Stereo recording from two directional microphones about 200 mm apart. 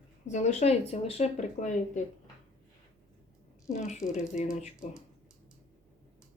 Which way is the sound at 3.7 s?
35° left (ahead or behind).